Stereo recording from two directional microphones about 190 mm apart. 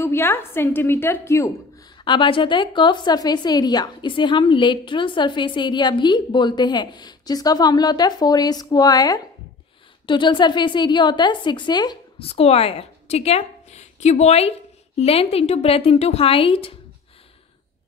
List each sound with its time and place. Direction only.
0.0 s a woman's voice: 10° left (ahead or behind); by 16.7 s 30° left (ahead or behind)